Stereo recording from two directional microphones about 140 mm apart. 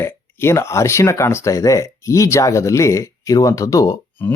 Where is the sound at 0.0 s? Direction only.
15° left (ahead or behind).